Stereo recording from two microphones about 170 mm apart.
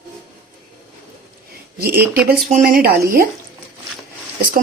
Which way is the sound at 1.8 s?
65° right (ahead or behind).